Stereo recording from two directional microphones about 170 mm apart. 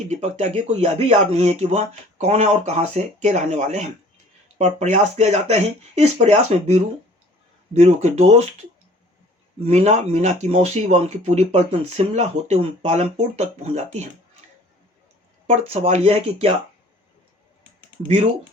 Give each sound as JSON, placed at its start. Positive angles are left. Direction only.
{"t": 0.1, "sound": "speech", "side_deg": -40}
{"t": 9.6, "sound": "speech", "side_deg": -40}
{"t": 15.4, "sound": "speech", "side_deg": -40}